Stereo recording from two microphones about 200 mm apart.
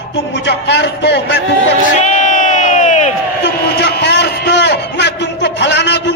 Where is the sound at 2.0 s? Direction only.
35° left (ahead or behind).